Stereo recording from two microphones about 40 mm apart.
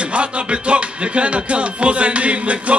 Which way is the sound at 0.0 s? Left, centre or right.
Right.